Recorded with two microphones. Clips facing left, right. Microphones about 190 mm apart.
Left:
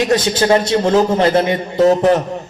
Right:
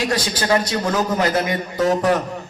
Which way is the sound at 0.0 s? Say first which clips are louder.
Left 7 dB; 25° left (ahead or behind).